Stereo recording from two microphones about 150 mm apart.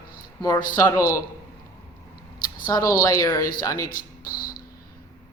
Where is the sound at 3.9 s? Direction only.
75° left (ahead or behind).